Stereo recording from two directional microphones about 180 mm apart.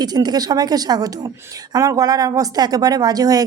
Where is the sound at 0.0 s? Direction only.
20° right (ahead or behind).